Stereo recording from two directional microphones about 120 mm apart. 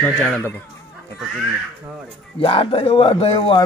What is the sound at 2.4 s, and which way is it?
Speech, 50° left (ahead or behind).